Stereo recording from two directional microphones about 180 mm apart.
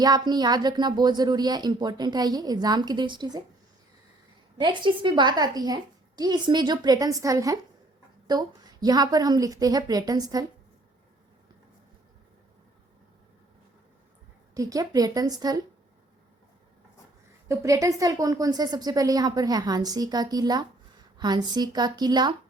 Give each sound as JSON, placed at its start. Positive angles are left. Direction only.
{"t": 0.0, "sound": "speech", "side_deg": -20}
{"t": 4.6, "sound": "speech", "side_deg": -25}
{"t": 14.5, "sound": "speech", "side_deg": -20}
{"t": 17.5, "sound": "speech", "side_deg": -15}